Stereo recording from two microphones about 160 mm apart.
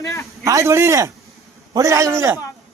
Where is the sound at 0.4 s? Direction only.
20° right (ahead or behind).